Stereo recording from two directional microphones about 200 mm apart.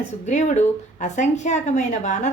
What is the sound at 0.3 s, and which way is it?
Speech, 35° left (ahead or behind).